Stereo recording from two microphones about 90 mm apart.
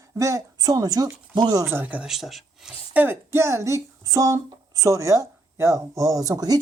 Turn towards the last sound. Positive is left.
turn(degrees=-45)  # may be behind; listen again after turning